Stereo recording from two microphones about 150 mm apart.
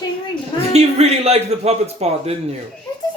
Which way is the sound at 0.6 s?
45° right (ahead or behind).